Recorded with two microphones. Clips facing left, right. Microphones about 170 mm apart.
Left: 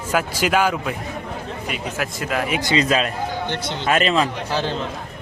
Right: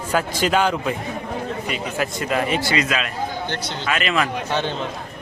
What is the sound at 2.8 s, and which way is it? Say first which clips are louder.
Speech: left 4 dB; 35° left (ahead or behind).